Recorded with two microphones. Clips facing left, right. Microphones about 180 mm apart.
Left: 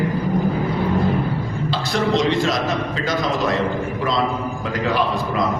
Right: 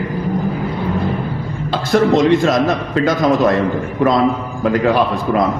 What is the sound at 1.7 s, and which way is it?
A man's voice, 50° right (ahead or behind).